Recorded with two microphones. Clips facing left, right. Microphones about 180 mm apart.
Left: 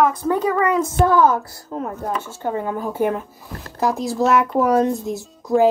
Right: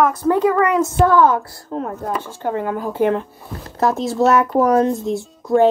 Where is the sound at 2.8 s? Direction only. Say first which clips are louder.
Right 5 dB; 10° left (ahead or behind).